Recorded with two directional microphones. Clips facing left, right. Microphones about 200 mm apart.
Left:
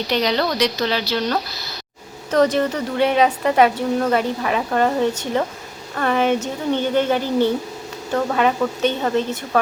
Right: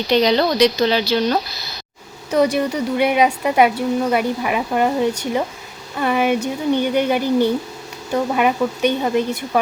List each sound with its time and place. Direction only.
0.1 s a woman's voice: 20° right (ahead or behind)